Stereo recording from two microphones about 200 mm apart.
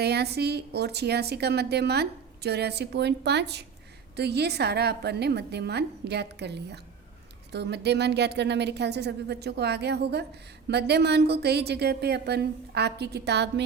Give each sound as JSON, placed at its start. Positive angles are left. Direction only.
{"t": 0.0, "sound": "a woman's voice", "side_deg": -55}